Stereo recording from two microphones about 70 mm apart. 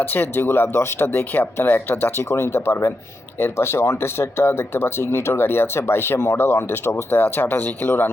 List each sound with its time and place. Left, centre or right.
0.1 s speech: left